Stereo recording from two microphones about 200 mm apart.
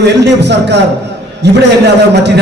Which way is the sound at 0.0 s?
60° right (ahead or behind).